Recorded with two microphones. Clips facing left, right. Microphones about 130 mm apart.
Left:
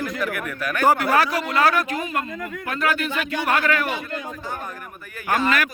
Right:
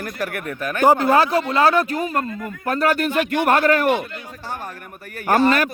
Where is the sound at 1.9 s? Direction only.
40° right (ahead or behind).